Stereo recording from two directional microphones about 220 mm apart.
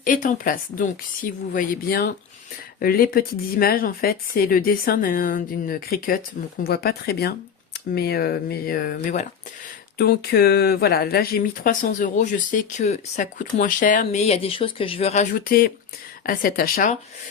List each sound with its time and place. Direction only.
0.0 s speech: 40° left (ahead or behind)